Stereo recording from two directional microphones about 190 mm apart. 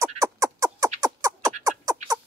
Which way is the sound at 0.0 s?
15° right (ahead or behind).